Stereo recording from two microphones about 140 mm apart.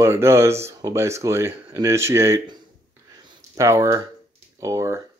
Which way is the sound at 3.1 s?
25° right (ahead or behind).